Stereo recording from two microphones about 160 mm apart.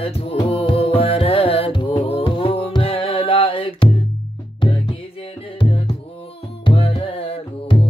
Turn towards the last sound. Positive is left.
turn(degrees=35)  # may be behind; listen again after turning